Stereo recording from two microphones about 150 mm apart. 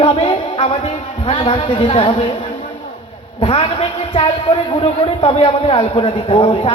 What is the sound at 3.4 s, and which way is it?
A woman's voice, 40° left (ahead or behind).